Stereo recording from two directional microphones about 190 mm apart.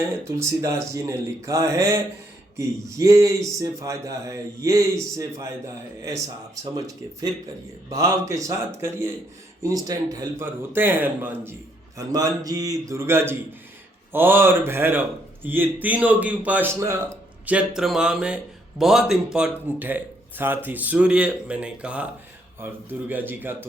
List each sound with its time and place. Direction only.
0.1 s a man's voice: 15° right (ahead or behind)